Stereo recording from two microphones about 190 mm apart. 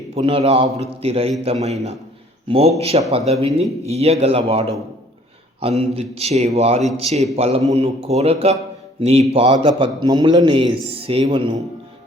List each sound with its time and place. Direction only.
0.1 s a man's voice: 30° right (ahead or behind)